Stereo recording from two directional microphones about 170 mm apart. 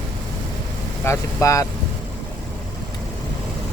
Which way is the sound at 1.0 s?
15° left (ahead or behind).